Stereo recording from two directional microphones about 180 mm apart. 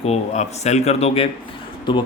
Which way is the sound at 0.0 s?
35° left (ahead or behind).